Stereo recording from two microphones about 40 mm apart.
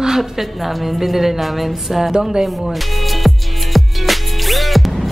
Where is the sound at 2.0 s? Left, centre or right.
Centre.